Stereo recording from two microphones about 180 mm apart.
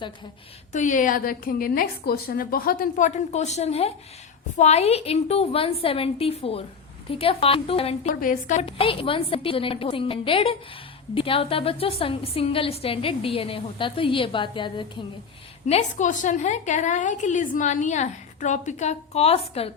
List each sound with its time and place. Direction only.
0.7 s a woman's voice: 45° left (ahead or behind)
8.2 s a woman's voice: 45° left (ahead or behind)
8.6 s a woman's voice: 30° left (ahead or behind)
15.6 s a woman's voice: 40° left (ahead or behind)